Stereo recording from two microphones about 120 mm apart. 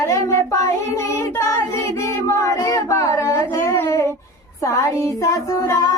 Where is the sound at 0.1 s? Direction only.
25° left (ahead or behind).